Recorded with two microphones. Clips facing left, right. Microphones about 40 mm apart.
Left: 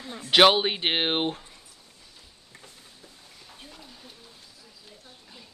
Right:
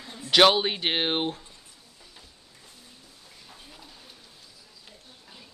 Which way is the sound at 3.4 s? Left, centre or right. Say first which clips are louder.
Left 2 dB; centre.